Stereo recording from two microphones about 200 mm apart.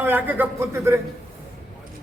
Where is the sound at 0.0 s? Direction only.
10° right (ahead or behind).